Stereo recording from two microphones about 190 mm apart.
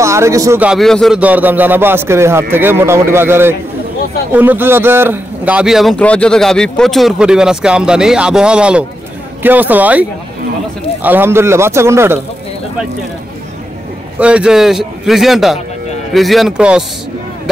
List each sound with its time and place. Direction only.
0.0 s a man's voice: 15° right (ahead or behind)
14.2 s speech: 5° right (ahead or behind)